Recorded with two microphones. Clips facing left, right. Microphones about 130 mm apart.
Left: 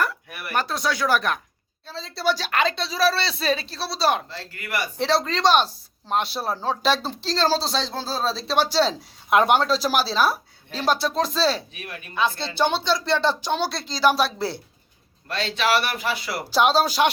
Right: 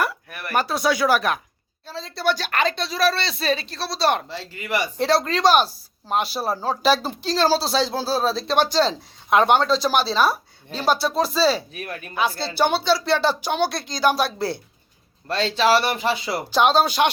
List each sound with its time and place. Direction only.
0.3 s a sound: 10° left (ahead or behind)
0.5 s speech: 10° right (ahead or behind)
4.3 s speech: 20° right (ahead or behind)
4.9 s speech: centre (ahead or behind)
11.7 s speech: 40° right (ahead or behind)
12.1 s speech: 5° right (ahead or behind)
13.7 s speech: 55° right (ahead or behind)
14.1 s speech: centre (ahead or behind)
15.3 s speech: 35° right (ahead or behind)
16.5 s speech: centre (ahead or behind)